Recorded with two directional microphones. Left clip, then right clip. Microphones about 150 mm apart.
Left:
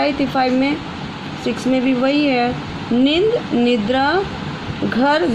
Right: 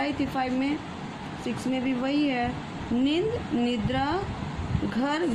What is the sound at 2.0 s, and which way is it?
Speech, 40° left (ahead or behind).